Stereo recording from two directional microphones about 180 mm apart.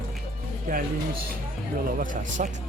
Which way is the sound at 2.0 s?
45° right (ahead or behind).